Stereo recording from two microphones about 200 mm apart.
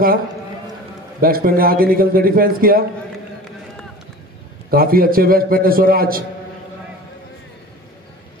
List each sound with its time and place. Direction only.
1.2 s a man's voice: 45° right (ahead or behind)
4.6 s a man's voice: 45° right (ahead or behind)